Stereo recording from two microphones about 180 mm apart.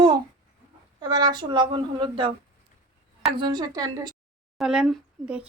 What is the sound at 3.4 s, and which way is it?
Speech, 25° right (ahead or behind).